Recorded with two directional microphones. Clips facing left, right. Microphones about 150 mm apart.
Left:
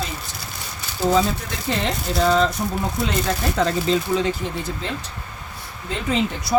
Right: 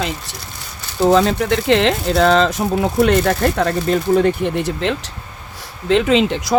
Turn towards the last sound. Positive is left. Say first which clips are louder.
# right 5 dB
turn(degrees=-90)